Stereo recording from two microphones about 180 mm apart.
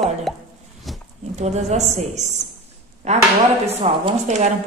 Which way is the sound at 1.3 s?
40° right (ahead or behind).